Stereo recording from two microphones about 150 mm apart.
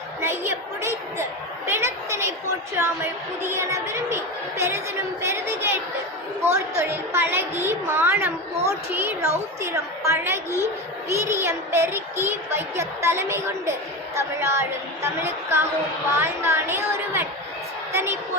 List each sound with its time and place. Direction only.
0.2 s a woman's voice: 15° right (ahead or behind)